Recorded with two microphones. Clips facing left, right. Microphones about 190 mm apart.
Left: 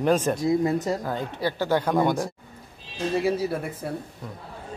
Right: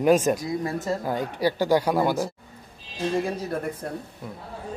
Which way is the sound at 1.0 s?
15° right (ahead or behind).